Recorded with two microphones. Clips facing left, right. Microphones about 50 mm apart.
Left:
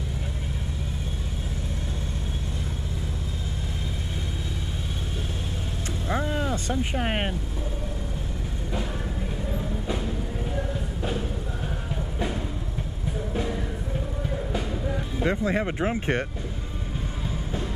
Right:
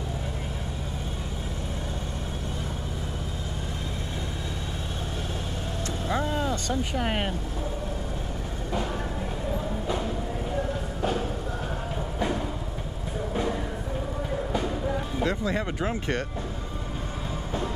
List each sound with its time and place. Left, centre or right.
6.0 s vehicle: left
6.4 s speech: left
15.2 s speech: left